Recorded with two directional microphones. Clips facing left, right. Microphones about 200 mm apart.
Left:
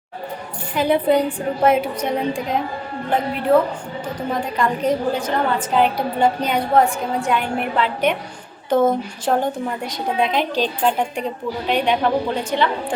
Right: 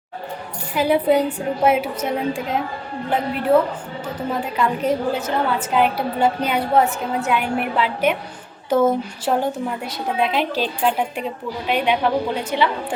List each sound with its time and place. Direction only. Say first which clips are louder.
0.7 s a woman's voice: even; 10° right (ahead or behind)
4.3 s a woman's voice: even; 5° right (ahead or behind)